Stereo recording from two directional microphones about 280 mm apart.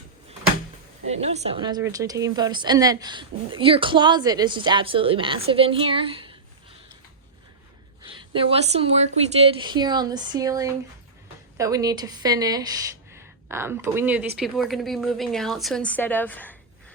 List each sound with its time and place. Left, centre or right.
1.0 s a woman's voice: right
8.0 s a woman's voice: centre